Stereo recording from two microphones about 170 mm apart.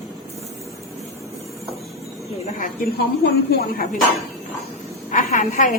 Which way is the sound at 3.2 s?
60° left (ahead or behind).